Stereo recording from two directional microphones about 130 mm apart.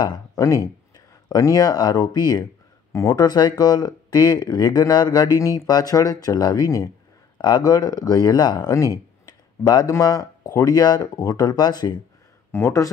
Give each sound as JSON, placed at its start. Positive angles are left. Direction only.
{"t": 0.0, "sound": "speech", "side_deg": 30}
{"t": 12.4, "sound": "speech", "side_deg": 20}